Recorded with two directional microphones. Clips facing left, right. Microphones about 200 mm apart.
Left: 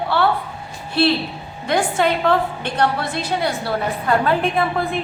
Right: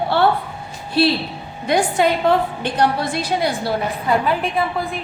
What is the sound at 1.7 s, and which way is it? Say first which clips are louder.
A woman's voice: right 2 dB; 15° right (ahead or behind).